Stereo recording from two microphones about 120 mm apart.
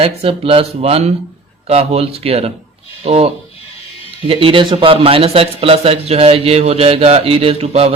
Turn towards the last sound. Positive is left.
turn(degrees=-55)  # may be behind; listen again after turning